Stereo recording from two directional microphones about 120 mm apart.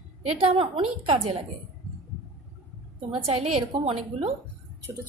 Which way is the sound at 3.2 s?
60° right (ahead or behind).